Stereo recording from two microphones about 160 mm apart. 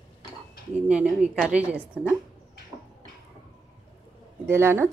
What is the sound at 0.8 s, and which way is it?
Speech, 5° right (ahead or behind).